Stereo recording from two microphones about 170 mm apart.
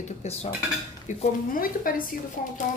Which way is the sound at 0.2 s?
40° left (ahead or behind).